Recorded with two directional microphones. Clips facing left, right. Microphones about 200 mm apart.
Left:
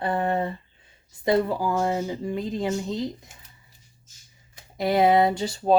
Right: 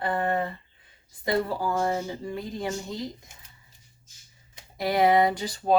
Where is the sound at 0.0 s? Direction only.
25° left (ahead or behind).